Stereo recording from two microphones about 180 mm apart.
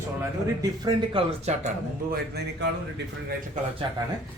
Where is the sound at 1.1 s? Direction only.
40° right (ahead or behind).